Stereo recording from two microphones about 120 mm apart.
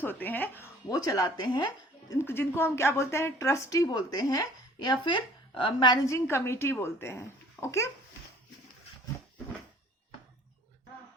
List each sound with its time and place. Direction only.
0.0 s speech: 15° left (ahead or behind)
0.9 s speech: 30° left (ahead or behind)
2.1 s a woman's voice: 20° left (ahead or behind); by 6.0 s 40° left (ahead or behind)
6.1 s a woman's voice: 20° left (ahead or behind)